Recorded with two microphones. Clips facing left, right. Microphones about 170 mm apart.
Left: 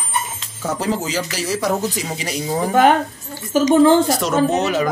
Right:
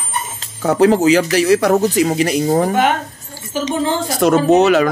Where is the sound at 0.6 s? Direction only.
65° right (ahead or behind).